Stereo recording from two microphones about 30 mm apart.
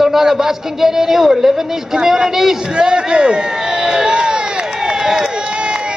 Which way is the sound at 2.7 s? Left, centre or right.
Right.